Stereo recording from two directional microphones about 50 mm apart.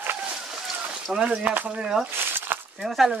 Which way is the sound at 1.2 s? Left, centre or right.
Right.